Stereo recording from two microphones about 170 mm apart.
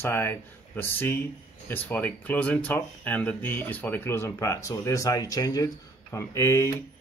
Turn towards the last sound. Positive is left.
turn(degrees=15)  # may be behind; listen again after turning